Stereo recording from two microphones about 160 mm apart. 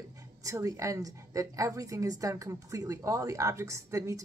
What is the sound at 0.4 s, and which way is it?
A woman's voice, 20° right (ahead or behind).